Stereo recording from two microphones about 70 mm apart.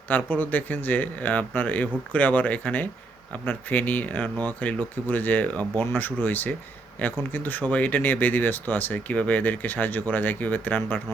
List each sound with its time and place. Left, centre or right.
0.1 s speech: left